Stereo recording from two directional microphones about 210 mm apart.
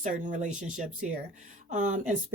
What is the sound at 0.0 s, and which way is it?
Speech, 35° right (ahead or behind).